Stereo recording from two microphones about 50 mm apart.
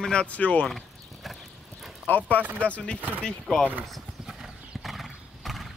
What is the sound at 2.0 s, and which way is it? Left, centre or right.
Speech, left.